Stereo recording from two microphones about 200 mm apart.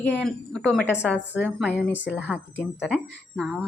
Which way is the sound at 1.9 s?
65° left (ahead or behind).